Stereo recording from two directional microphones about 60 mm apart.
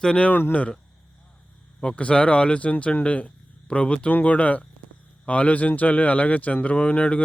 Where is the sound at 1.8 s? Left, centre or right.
Centre.